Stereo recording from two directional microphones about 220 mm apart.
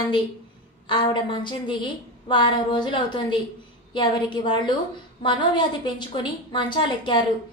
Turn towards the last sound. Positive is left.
turn(degrees=20)  # may be behind; listen again after turning